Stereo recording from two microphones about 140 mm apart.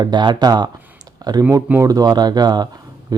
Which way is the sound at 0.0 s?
30° right (ahead or behind).